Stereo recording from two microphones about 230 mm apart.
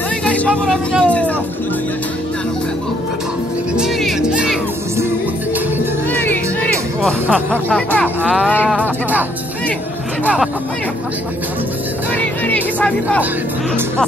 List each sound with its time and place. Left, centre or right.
0.2 s music: centre
3.7 s music: centre
6.1 s music: centre
7.7 s speech: centre
8.5 s speech: centre
8.7 s speech: centre
10.2 s speech: centre
12.2 s speech: centre